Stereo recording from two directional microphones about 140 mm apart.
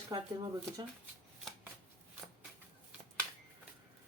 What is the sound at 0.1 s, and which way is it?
Speech, 25° right (ahead or behind).